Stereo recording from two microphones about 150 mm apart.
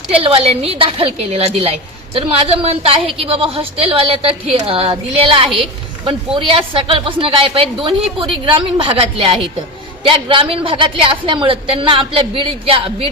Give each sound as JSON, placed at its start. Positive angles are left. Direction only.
{"t": 0.1, "sound": "a woman's voice", "side_deg": -40}